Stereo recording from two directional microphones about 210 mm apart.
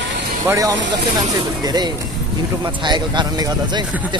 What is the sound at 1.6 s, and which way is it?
Speech, 20° right (ahead or behind).